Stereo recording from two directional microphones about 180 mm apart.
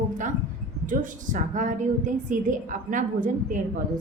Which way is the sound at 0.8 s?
45° right (ahead or behind).